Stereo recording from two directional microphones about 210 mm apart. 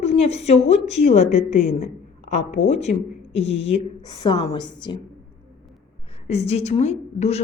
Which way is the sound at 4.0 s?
20° left (ahead or behind).